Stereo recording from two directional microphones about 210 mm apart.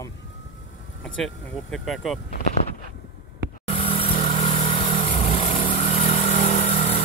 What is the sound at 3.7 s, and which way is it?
Vehicle, 25° left (ahead or behind).